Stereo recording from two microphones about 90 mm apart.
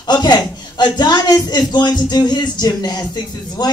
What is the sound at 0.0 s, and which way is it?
A man's voice, 55° left (ahead or behind).